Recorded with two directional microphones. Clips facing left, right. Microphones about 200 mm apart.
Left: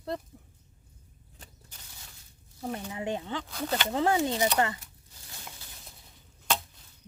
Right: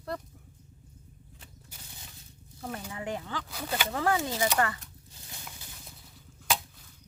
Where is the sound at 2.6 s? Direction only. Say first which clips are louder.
Left 3 dB; 20° left (ahead or behind).